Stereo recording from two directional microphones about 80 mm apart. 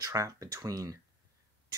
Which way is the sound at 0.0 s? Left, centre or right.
Right.